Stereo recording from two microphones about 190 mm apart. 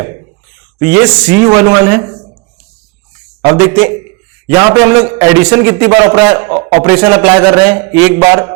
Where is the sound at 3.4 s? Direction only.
20° right (ahead or behind).